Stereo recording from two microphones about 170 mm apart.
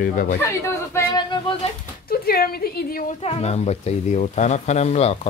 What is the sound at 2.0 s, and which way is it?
Speech, 65° left (ahead or behind).